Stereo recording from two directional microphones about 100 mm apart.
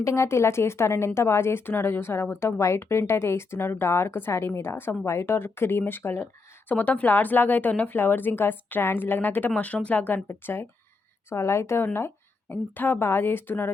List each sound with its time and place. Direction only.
0.0 s a woman's voice: 30° left (ahead or behind)